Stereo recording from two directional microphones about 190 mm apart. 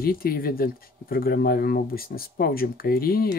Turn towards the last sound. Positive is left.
turn(degrees=50)  # may be behind; listen again after turning